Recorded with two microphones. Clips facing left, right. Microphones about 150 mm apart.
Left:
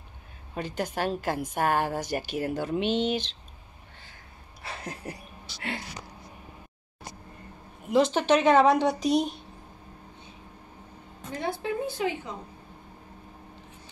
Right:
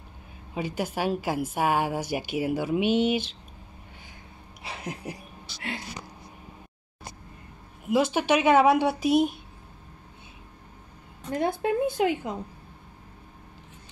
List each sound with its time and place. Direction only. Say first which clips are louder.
0.6 s a woman's voice: right 1 dB; 10° right (ahead or behind)
4.6 s speech: right 2 dB; 15° right (ahead or behind)
7.9 s a woman's voice: left 1 dB; 10° right (ahead or behind)
11.3 s a woman's voice: right 5 dB; 50° right (ahead or behind)